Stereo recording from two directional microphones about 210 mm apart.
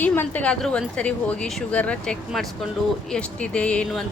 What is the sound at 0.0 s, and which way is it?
A woman's voice, 10° left (ahead or behind).